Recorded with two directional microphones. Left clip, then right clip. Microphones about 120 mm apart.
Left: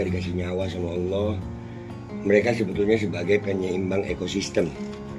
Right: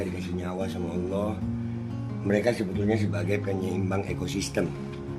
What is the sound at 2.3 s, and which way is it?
A man's voice, 40° right (ahead or behind).